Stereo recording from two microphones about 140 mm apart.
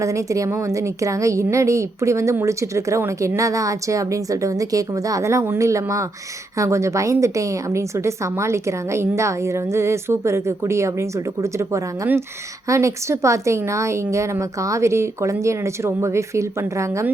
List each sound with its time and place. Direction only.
0.0 s a woman's voice: 20° right (ahead or behind)